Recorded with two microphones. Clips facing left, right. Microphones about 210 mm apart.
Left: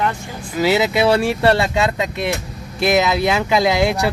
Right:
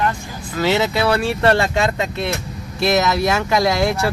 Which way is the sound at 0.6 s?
10° left (ahead or behind).